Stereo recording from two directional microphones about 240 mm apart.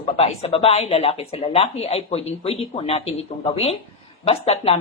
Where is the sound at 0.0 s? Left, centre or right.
Left.